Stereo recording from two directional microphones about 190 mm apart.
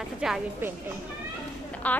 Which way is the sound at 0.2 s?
5° right (ahead or behind).